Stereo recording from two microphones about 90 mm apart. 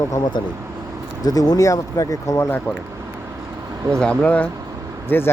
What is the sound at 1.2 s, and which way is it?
Speech, 45° left (ahead or behind).